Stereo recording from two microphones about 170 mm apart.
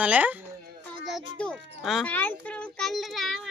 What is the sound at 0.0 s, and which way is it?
Speech, 10° right (ahead or behind).